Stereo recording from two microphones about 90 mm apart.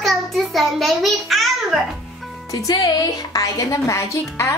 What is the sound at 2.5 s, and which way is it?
Speech, 40° left (ahead or behind).